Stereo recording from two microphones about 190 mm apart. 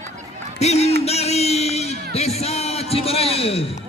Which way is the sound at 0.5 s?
35° left (ahead or behind).